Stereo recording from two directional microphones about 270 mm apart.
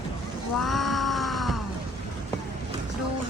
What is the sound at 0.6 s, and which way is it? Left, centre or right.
Groan, centre.